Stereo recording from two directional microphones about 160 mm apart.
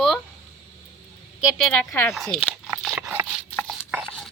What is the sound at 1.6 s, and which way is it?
Speech, 10° left (ahead or behind).